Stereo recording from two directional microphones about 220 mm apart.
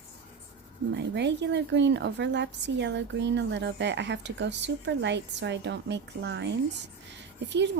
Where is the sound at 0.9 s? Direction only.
50° right (ahead or behind).